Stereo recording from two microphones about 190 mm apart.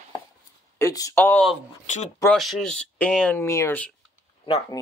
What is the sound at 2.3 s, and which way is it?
Speech, centre (ahead or behind).